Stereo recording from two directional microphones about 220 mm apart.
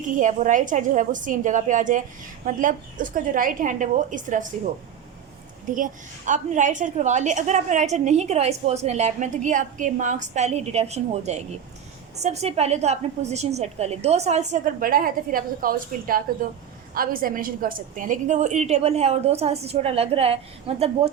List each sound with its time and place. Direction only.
0.1 s a woman's voice: 35° right (ahead or behind)
5.6 s a woman's voice: 35° right (ahead or behind)